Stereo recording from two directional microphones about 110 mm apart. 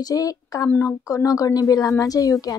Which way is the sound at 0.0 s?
35° left (ahead or behind).